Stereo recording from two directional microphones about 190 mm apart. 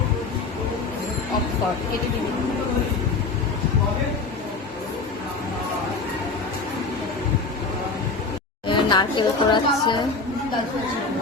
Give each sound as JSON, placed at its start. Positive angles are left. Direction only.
{"t": 8.6, "sound": "a woman's voice", "side_deg": 25}